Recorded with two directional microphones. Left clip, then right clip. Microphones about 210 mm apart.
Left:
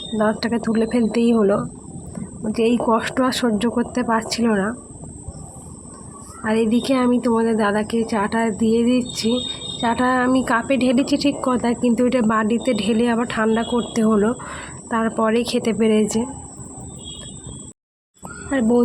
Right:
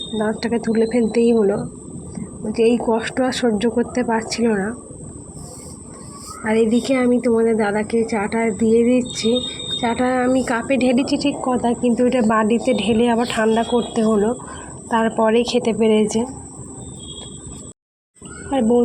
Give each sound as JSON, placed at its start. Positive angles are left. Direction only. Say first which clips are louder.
{"t": 0.2, "sound": "a woman's voice", "louder": "left 1 dB", "side_deg": 10}
{"t": 6.4, "sound": "a woman's voice", "louder": "right 2 dB", "side_deg": 5}
{"t": 15.8, "sound": "speech", "louder": "right 1 dB", "side_deg": 40}